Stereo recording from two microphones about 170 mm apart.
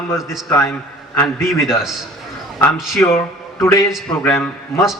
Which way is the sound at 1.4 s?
Centre (ahead or behind).